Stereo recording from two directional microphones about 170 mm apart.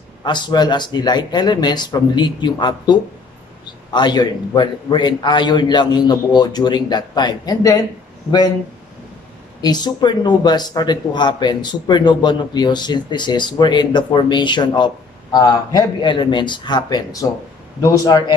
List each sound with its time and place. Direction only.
0.2 s speech: 25° left (ahead or behind)
9.6 s speech: 25° left (ahead or behind)